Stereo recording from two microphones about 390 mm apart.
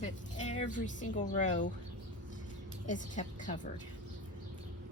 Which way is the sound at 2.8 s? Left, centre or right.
Centre.